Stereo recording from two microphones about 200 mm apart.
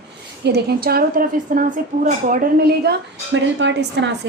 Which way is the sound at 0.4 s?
55° right (ahead or behind).